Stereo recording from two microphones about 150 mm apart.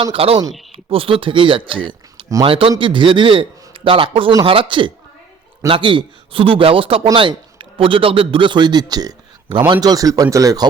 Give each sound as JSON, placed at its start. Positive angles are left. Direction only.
{"t": 0.0, "sound": "a man's voice", "side_deg": -35}